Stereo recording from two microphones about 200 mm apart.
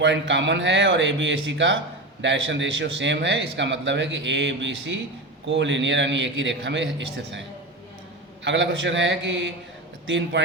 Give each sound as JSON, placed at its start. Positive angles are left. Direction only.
{"t": 0.0, "sound": "a man's voice", "side_deg": -65}
{"t": 8.4, "sound": "a man's voice", "side_deg": -65}